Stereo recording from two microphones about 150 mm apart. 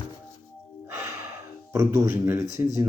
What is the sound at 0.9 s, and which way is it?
Gasp, 20° right (ahead or behind).